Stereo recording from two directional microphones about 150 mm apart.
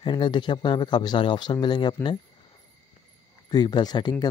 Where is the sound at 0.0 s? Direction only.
30° left (ahead or behind).